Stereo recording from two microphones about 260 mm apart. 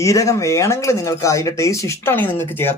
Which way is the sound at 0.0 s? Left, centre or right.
Centre.